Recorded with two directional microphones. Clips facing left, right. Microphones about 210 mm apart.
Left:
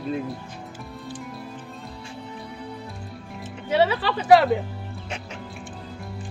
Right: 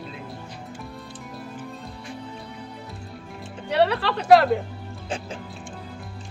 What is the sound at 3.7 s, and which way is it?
Speech, centre (ahead or behind).